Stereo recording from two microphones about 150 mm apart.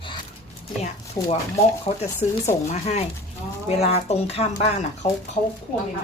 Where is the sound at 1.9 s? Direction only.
45° left (ahead or behind).